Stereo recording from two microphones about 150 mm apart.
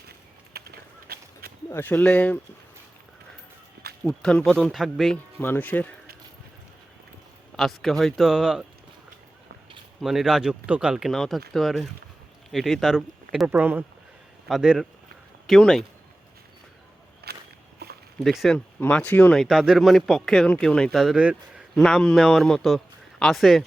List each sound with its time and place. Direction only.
0.5 s a sound: 90° right
1.7 s speech: 15° left (ahead or behind)
4.0 s speech: 5° left (ahead or behind)
5.4 s speech: 10° left (ahead or behind)
7.5 s speech: centre (ahead or behind)
10.0 s speech: centre (ahead or behind)
17.2 s a sound: 90° right
18.2 s speech: centre (ahead or behind)
21.8 s speech: 5° left (ahead or behind)